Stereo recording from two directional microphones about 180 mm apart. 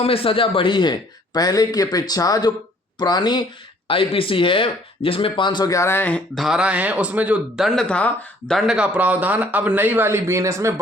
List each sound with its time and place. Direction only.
0.0 s a man's voice: 30° left (ahead or behind); by 10.8 s 15° right (ahead or behind)